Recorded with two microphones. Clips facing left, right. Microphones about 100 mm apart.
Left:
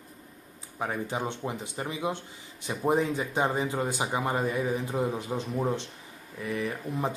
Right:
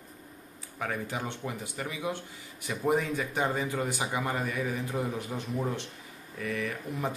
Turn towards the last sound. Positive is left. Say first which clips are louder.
# left 2 dB
turn(degrees=20)  # may be behind; listen again after turning